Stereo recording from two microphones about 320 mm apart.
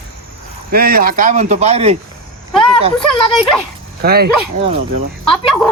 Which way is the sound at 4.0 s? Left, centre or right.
Right.